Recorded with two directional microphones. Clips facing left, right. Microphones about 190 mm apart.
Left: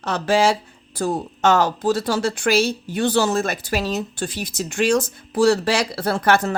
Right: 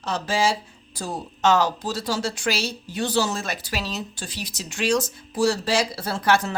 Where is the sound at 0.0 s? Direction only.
65° left (ahead or behind).